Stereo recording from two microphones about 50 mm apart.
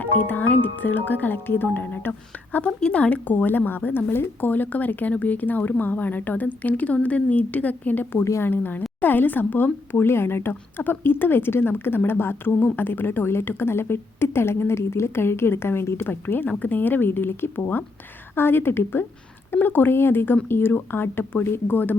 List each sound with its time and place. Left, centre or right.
0.0 s a woman's voice: left
16.2 s a woman's voice: left